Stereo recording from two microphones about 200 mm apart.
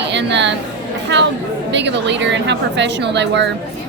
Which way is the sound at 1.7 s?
60° right (ahead or behind).